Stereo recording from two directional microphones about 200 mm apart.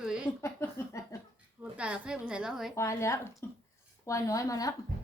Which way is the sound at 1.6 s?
5° right (ahead or behind).